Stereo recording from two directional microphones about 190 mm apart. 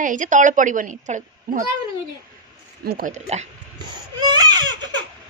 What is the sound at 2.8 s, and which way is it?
Speech, 55° right (ahead or behind).